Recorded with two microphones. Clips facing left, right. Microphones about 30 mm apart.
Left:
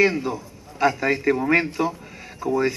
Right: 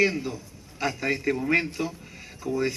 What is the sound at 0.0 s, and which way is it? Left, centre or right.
A man's voice, centre.